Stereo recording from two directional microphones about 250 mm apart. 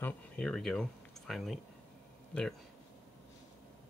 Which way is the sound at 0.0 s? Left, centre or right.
Centre.